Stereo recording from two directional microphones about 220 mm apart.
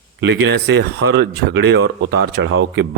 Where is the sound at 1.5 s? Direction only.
55° right (ahead or behind).